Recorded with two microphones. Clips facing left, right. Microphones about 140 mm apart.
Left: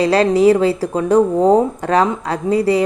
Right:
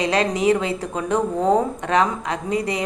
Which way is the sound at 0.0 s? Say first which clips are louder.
Left 7 dB; 35° left (ahead or behind).